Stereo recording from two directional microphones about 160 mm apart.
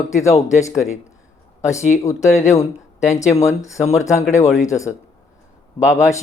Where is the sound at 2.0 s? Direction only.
20° left (ahead or behind).